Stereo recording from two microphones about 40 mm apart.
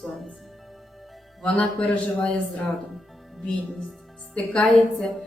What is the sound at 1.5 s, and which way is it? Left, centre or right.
Speech, left.